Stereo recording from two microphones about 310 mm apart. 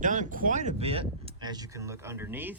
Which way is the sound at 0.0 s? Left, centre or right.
Right.